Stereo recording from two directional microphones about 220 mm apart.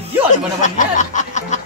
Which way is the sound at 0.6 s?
35° left (ahead or behind).